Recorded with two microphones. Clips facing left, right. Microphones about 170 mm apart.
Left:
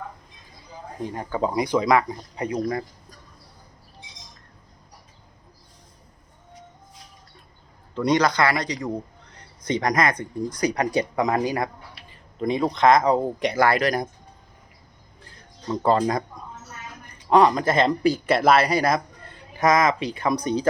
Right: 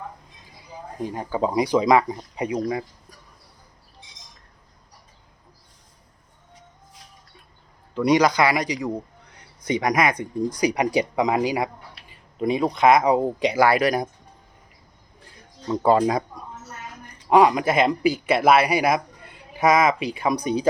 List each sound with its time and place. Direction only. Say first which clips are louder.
1.1 s speech: right 2 dB; 10° right (ahead or behind)
7.9 s speech: right 2 dB; 10° right (ahead or behind)
15.7 s speech: right 2 dB; 10° right (ahead or behind)
17.2 s speech: right 1 dB; 10° right (ahead or behind)